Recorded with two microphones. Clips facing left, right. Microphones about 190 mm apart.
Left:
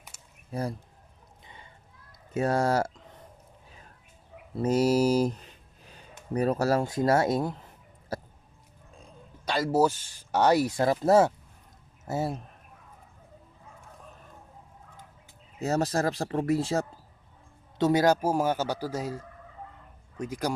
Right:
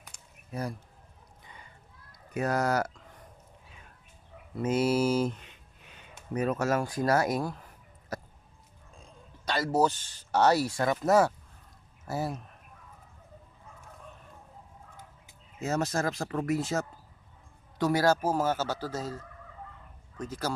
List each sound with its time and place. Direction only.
0.5 s speech: 30° left (ahead or behind)
2.3 s speech: 30° left (ahead or behind)
4.5 s a sound: 35° left (ahead or behind)
6.3 s speech: 35° left (ahead or behind)
8.1 s a sound: 30° left (ahead or behind)
9.5 s speech: 10° left (ahead or behind)
10.8 s speech: 30° left (ahead or behind)
15.5 s speech: 35° left (ahead or behind)
17.7 s speech: 20° left (ahead or behind)